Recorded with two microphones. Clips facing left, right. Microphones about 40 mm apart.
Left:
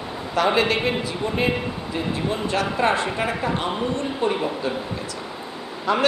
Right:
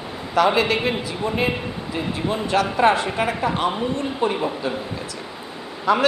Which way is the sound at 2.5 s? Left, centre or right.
Centre.